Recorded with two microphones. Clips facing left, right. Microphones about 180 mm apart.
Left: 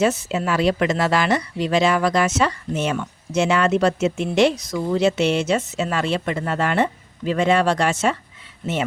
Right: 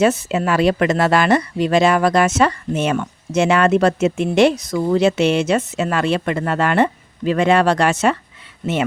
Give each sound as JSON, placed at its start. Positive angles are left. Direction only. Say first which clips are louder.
{"t": 0.0, "sound": "speech", "louder": "right 4 dB", "side_deg": -60}